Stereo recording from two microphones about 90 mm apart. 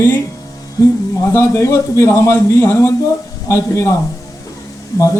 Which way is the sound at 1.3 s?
35° left (ahead or behind).